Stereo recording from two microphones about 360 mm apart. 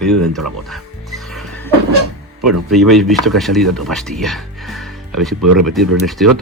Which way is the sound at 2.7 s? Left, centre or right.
Centre.